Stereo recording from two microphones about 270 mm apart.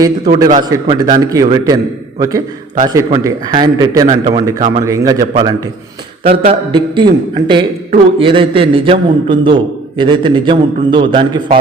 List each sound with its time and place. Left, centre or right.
0.0 s a man's voice: centre